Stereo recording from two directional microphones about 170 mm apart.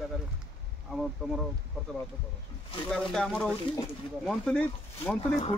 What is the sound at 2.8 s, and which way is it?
Speech, 5° left (ahead or behind).